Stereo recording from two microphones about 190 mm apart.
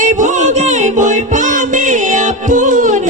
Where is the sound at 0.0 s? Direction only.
40° right (ahead or behind).